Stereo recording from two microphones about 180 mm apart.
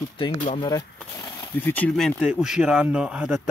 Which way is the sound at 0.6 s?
20° left (ahead or behind).